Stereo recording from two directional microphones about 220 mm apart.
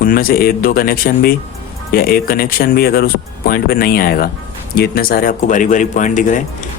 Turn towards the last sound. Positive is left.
turn(degrees=35)  # may be behind; listen again after turning